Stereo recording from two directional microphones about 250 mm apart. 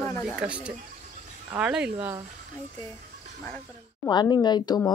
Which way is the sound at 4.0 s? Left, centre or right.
Centre.